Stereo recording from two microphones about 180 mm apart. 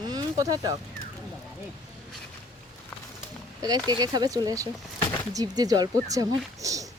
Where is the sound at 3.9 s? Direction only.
25° right (ahead or behind).